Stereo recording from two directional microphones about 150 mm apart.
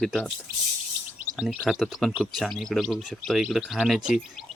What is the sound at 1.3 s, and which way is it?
Speech, 5° right (ahead or behind).